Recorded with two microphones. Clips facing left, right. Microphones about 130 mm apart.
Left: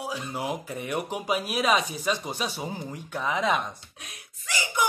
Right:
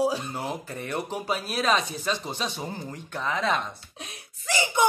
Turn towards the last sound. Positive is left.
turn(degrees=-25)  # may be behind; listen again after turning